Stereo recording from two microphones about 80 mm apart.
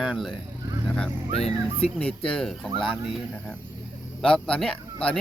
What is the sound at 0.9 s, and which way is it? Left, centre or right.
Speech, centre.